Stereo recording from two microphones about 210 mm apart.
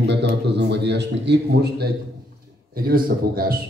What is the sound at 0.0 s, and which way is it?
A man's voice, 55° right (ahead or behind).